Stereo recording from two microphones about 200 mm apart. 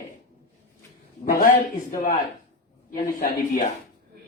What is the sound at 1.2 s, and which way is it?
Speech, 45° left (ahead or behind).